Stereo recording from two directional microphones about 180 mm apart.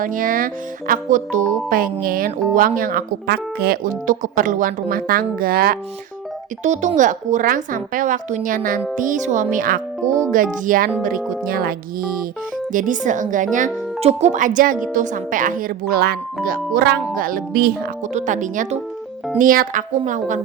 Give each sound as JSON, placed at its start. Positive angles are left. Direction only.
{"t": 0.0, "sound": "speech", "side_deg": -50}
{"t": 6.6, "sound": "speech", "side_deg": -40}
{"t": 10.0, "sound": "a child's voice", "side_deg": -15}
{"t": 10.3, "sound": "speech", "side_deg": -50}
{"t": 17.2, "sound": "music", "side_deg": -50}
{"t": 18.1, "sound": "speech", "side_deg": -45}